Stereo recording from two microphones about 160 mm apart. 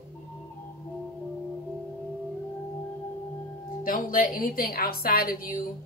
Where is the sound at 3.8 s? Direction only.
65° left (ahead or behind).